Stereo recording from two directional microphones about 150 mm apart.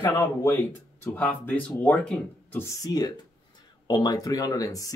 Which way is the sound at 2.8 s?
25° left (ahead or behind).